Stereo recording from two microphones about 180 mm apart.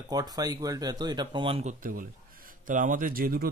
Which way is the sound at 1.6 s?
50° right (ahead or behind).